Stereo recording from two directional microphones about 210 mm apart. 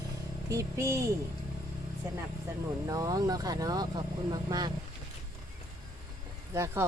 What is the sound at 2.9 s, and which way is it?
Speech, 15° right (ahead or behind).